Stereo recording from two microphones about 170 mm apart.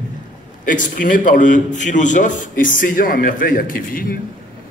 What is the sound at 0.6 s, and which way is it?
A man's voice, 50° left (ahead or behind).